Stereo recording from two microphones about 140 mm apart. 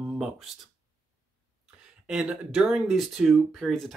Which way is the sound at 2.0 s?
5° right (ahead or behind).